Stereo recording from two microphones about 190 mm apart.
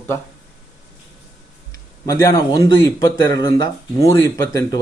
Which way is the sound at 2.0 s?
20° left (ahead or behind).